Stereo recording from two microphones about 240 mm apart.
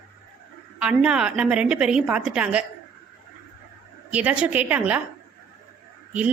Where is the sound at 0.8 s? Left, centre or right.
Centre.